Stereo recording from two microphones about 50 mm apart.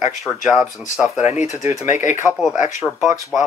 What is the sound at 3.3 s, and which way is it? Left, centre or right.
Speech, right.